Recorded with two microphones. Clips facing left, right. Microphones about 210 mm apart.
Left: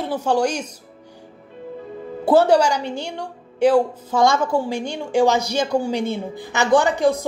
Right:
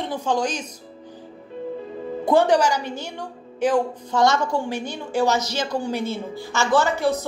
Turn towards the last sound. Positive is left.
turn(degrees=15)  # may be behind; listen again after turning